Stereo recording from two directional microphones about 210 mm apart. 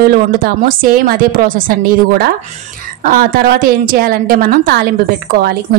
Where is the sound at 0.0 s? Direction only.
45° right (ahead or behind).